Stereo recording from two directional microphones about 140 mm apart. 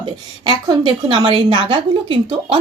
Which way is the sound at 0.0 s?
30° right (ahead or behind).